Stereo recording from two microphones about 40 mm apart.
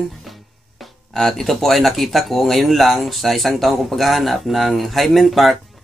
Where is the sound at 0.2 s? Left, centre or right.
Centre.